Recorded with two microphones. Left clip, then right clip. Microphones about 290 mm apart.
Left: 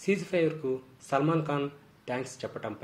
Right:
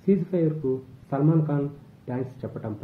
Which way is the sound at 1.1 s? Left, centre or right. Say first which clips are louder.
Right 2 dB; left.